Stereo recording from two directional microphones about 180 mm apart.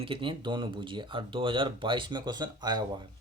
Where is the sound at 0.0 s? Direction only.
30° right (ahead or behind).